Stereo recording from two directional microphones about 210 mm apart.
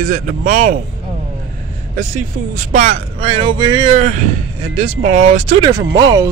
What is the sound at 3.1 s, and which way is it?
Speech, 25° right (ahead or behind).